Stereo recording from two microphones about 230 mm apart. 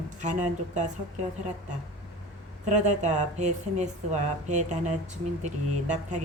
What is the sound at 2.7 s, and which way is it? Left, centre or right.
Speech, right.